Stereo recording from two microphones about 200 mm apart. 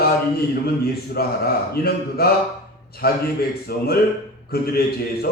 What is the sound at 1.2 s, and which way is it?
A man's voice, 50° left (ahead or behind).